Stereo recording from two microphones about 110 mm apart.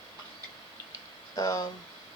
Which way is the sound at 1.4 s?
35° left (ahead or behind).